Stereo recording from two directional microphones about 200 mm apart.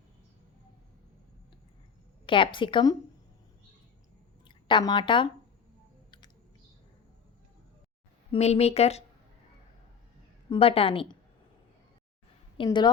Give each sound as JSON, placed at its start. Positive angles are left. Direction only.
{"t": 2.2, "sound": "a woman's voice", "side_deg": 25}
{"t": 4.4, "sound": "speech", "side_deg": 20}
{"t": 8.3, "sound": "speech", "side_deg": 30}
{"t": 10.5, "sound": "a woman's voice", "side_deg": 30}
{"t": 12.5, "sound": "speech", "side_deg": 20}